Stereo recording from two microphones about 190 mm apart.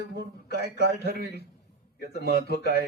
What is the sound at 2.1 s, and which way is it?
Speech, 60° left (ahead or behind).